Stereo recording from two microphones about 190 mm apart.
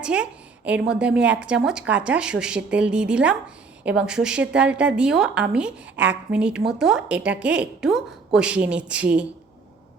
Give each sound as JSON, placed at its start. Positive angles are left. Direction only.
{"t": 0.0, "sound": "a woman's voice", "side_deg": -5}